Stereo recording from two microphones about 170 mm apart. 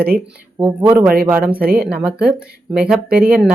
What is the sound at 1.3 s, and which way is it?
Speech, 10° right (ahead or behind).